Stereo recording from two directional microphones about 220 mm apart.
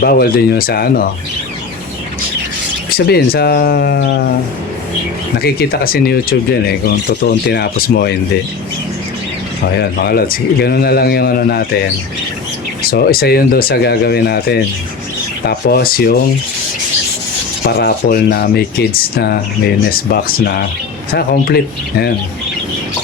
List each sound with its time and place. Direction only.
0.0 s speech: 45° left (ahead or behind)
3.1 s speech: 45° left (ahead or behind)
5.4 s speech: 45° left (ahead or behind)
9.7 s speech: 45° left (ahead or behind)
17.7 s speech: 45° left (ahead or behind)